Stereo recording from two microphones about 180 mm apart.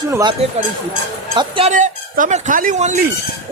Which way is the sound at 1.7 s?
45° right (ahead or behind).